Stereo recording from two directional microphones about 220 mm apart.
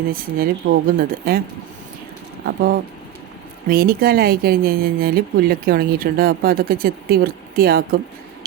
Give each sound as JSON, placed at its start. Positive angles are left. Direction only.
{"t": 0.1, "sound": "speech", "side_deg": -40}
{"t": 3.7, "sound": "speech", "side_deg": -40}